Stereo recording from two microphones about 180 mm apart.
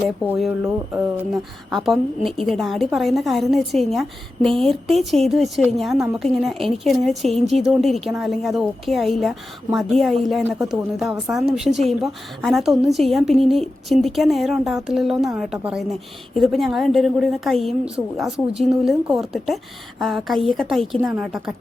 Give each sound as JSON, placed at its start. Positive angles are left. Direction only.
{"t": 0.3, "sound": "a woman's voice", "side_deg": 0}
{"t": 1.7, "sound": "a woman's voice", "side_deg": 0}